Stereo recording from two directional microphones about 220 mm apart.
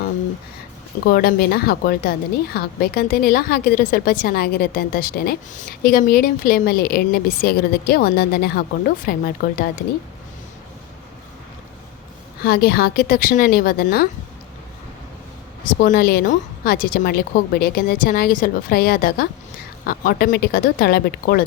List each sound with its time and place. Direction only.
1.1 s a woman's voice: 45° left (ahead or behind)
12.4 s a woman's voice: 45° left (ahead or behind)
15.8 s a woman's voice: 40° left (ahead or behind)